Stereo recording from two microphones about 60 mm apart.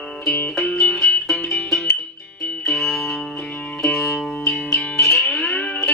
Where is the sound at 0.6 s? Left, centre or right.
Centre.